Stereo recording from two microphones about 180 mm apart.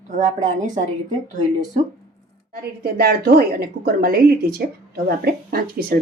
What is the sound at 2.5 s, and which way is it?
A woman's voice, 60° right (ahead or behind).